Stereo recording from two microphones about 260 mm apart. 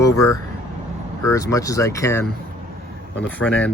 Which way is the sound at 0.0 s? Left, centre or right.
Centre.